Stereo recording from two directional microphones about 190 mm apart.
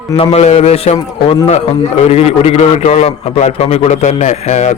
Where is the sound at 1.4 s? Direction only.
35° left (ahead or behind).